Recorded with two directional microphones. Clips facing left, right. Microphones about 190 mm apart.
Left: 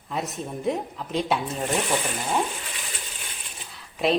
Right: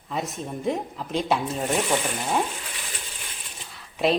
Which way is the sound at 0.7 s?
Centre (ahead or behind).